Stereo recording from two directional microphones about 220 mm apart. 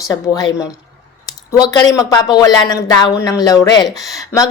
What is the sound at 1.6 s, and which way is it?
A woman's voice, 15° left (ahead or behind).